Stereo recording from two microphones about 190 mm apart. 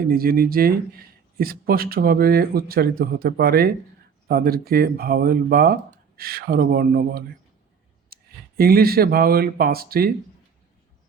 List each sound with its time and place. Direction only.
0.0 s speech: 50° right (ahead or behind)